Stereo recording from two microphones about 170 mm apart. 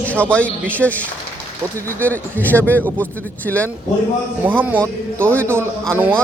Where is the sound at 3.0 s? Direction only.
10° left (ahead or behind).